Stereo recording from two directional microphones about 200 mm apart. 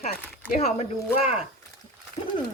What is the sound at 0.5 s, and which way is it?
Speech, 30° left (ahead or behind).